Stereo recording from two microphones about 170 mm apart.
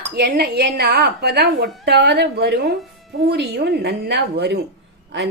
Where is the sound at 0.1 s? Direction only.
70° right (ahead or behind).